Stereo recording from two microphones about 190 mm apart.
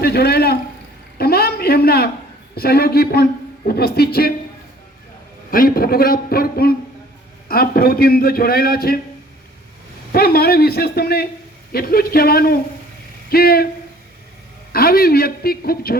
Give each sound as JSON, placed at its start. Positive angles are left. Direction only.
{"t": 0.0, "sound": "a sound", "side_deg": 55}
{"t": 2.6, "sound": "a man's voice", "side_deg": 55}
{"t": 5.5, "sound": "a man's voice", "side_deg": 50}
{"t": 10.1, "sound": "a man's voice", "side_deg": 55}
{"t": 14.7, "sound": "a man's voice", "side_deg": 50}